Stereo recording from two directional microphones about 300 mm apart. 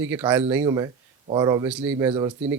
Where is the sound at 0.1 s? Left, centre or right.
Centre.